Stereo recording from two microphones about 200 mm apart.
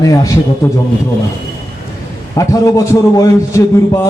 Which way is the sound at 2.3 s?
15° left (ahead or behind).